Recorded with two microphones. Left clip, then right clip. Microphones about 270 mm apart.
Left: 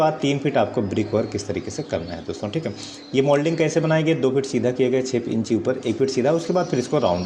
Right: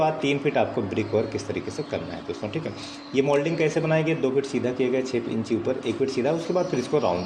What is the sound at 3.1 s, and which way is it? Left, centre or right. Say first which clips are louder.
Speech: left 3 dB; left.